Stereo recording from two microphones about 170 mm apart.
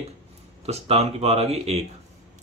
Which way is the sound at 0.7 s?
40° right (ahead or behind).